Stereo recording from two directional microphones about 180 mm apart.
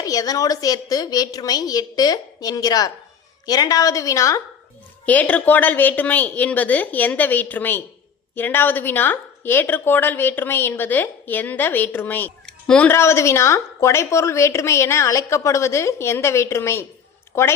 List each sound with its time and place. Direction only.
0.0 s a woman's voice: 20° left (ahead or behind)